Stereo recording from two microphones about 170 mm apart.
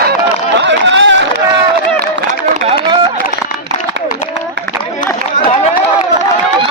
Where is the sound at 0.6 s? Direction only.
90° right.